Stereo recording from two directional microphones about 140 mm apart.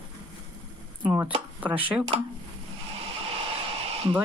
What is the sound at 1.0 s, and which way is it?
Speech, 10° right (ahead or behind).